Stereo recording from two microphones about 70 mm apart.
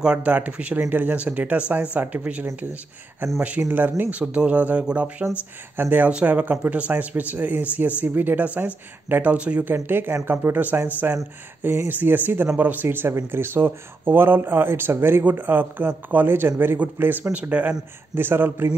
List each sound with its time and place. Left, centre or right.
0.0 s speech: centre
3.4 s speech: right
9.8 s speech: right
11.9 s speech: right
18.1 s speech: right